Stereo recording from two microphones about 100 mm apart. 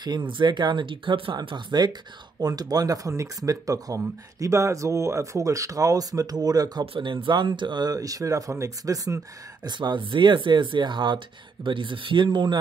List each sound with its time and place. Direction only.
0.0 s speech: 50° right (ahead or behind)
6.9 s speech: 60° right (ahead or behind); by 9.2 s 35° right (ahead or behind)
9.7 s speech: 50° right (ahead or behind)